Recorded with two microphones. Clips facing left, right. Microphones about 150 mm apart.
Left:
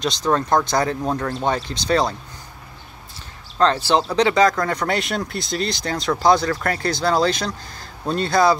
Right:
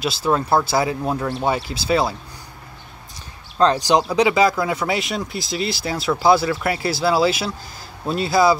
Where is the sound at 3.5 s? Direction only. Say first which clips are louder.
Right 1 dB; 15° right (ahead or behind).